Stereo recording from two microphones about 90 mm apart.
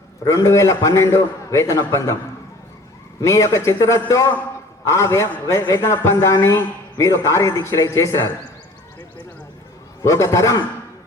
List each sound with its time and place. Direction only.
0.3 s a man's voice: 30° left (ahead or behind)
3.2 s a man's voice: 35° left (ahead or behind)
10.0 s a man's voice: 35° left (ahead or behind)